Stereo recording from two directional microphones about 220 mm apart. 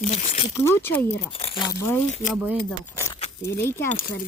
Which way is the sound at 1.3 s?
25° left (ahead or behind).